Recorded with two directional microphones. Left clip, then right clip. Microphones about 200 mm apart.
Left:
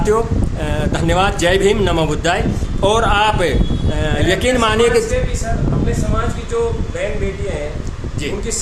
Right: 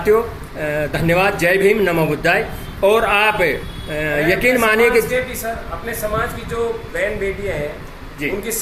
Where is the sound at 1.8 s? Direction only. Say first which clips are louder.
Even; 15° left (ahead or behind).